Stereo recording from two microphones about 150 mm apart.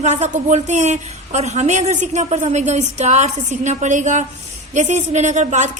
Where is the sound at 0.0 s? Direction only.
50° right (ahead or behind).